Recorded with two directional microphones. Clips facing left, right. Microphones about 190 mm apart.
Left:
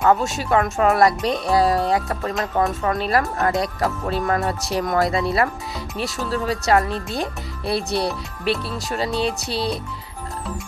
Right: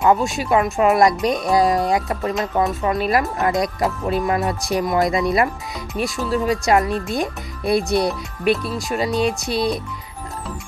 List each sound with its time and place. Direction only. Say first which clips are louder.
0.0 s speech: right 1 dB; 15° right (ahead or behind)